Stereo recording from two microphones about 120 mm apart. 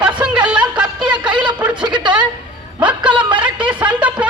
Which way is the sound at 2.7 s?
10° right (ahead or behind).